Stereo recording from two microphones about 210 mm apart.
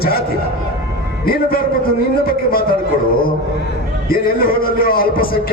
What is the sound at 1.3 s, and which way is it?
A man's voice, 45° left (ahead or behind).